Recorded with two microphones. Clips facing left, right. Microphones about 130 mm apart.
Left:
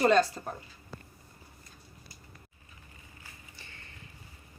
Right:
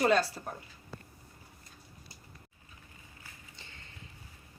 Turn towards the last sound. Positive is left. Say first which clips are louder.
# left 1 dB
turn(degrees=-20)  # may be behind; listen again after turning